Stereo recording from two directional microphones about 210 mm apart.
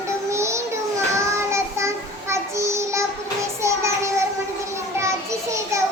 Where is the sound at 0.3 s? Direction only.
15° right (ahead or behind).